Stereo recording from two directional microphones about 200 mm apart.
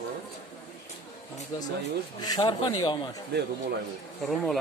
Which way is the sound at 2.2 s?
20° left (ahead or behind).